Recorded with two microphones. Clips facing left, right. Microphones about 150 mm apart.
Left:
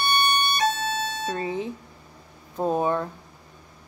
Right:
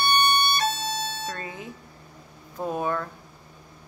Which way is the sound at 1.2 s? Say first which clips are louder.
Left 7 dB; 25° left (ahead or behind).